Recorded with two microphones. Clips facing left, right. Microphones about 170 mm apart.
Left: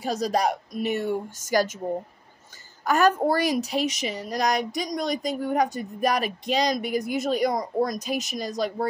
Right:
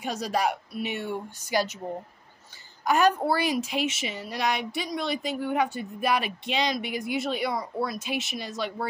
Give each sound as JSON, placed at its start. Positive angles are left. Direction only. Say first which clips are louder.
{"t": 0.0, "sound": "a woman's voice", "louder": "left 3 dB", "side_deg": 35}
{"t": 2.8, "sound": "a woman's voice", "louder": "left 2 dB", "side_deg": 40}